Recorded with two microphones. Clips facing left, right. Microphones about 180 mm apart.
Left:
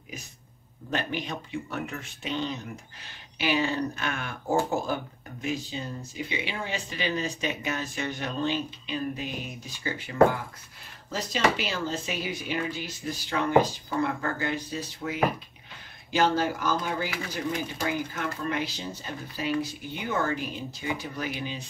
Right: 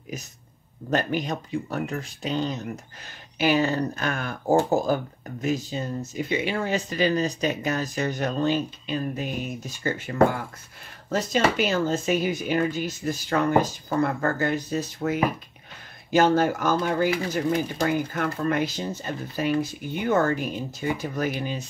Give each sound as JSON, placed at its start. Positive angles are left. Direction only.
{"t": 0.8, "sound": "speech", "side_deg": -45}